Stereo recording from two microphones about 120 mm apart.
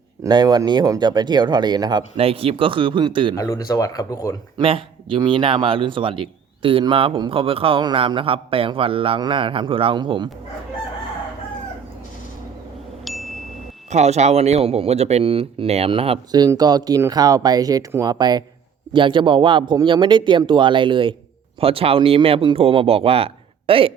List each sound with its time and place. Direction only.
0.3 s speech: 35° right (ahead or behind)
2.1 s a man's voice: 50° right (ahead or behind)
3.3 s speech: 30° left (ahead or behind)
4.6 s a man's voice: 45° right (ahead or behind)
13.1 s chime: centre (ahead or behind)
13.9 s speech: 70° right (ahead or behind); by 16.1 s 50° right (ahead or behind)
16.6 s a man's voice: 35° right (ahead or behind); by 23.9 s 50° right (ahead or behind)